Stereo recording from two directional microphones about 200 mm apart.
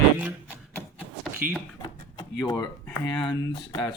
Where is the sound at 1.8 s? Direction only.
20° left (ahead or behind).